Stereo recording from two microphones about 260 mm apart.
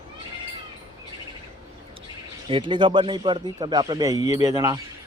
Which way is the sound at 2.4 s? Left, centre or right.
Centre.